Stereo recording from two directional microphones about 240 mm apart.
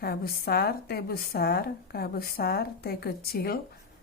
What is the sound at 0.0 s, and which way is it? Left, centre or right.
A woman's voice, left.